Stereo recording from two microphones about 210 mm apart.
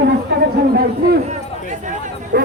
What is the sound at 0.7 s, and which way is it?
Speech, 45° right (ahead or behind).